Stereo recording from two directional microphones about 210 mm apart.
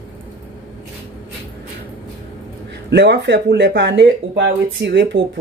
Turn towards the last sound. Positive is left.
turn(degrees=-60)  # may be behind; listen again after turning